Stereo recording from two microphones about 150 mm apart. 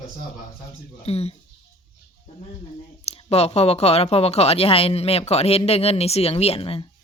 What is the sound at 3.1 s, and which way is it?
Speech, 45° left (ahead or behind).